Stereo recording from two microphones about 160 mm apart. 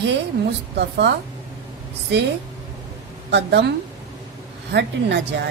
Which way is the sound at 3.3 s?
90° right.